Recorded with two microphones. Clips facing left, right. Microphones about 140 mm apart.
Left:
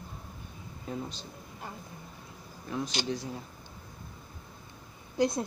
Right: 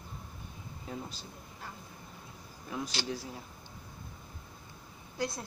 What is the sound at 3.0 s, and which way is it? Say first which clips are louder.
Speech: left 4 dB; 20° left (ahead or behind).